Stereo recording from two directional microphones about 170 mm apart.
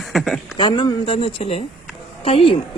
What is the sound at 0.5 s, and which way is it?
Speech, 25° left (ahead or behind).